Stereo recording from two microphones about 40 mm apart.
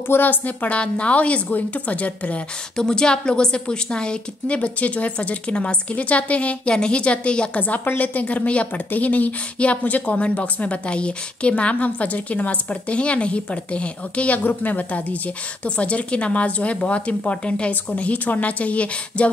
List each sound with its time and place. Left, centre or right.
0.1 s a woman's voice: left
0.7 s a woman's voice: left
2.8 s a woman's voice: centre
4.6 s a woman's voice: left
6.7 s a woman's voice: left
8.0 s a woman's voice: left
14.4 s a woman's voice: left